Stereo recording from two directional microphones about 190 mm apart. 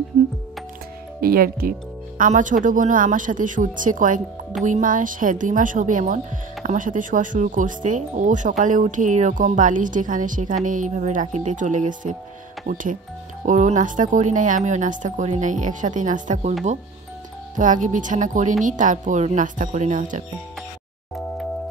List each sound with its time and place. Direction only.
1.2 s a woman's voice: 50° right (ahead or behind)
17.6 s speech: 40° right (ahead or behind)